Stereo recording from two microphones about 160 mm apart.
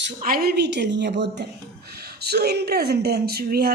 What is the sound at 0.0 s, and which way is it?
A woman's voice, 70° right (ahead or behind).